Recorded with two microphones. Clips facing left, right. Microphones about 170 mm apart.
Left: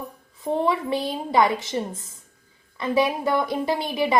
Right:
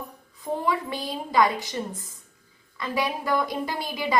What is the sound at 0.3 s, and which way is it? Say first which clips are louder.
A woman's voice: left 4 dB; 25° left (ahead or behind).